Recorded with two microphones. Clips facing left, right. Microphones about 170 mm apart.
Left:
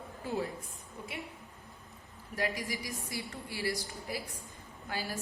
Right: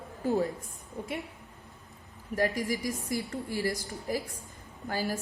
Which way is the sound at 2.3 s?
45° right (ahead or behind).